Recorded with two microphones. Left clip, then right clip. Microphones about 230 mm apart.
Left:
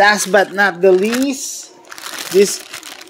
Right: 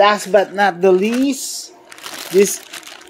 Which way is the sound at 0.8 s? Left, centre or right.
Centre.